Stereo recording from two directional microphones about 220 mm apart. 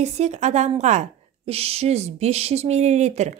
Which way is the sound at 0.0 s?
30° right (ahead or behind).